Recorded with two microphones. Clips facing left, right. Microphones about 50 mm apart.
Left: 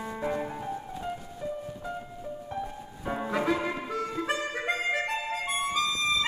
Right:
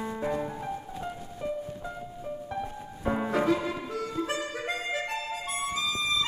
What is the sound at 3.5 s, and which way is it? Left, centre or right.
Music, left.